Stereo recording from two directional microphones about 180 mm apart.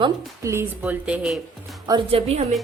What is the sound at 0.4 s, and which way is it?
Speech, 15° right (ahead or behind).